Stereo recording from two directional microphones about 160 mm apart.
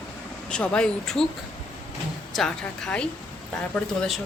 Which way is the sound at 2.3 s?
5° left (ahead or behind).